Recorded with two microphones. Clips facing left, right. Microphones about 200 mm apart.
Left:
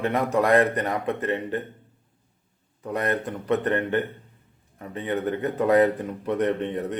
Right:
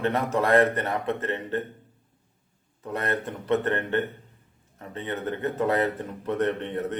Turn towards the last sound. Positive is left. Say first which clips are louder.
# left 2 dB
turn(degrees=15)  # may be behind; listen again after turning